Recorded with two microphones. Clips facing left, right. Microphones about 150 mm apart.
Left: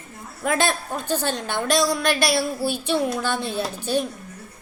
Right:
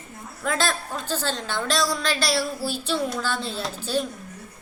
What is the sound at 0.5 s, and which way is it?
A woman's voice, 15° left (ahead or behind).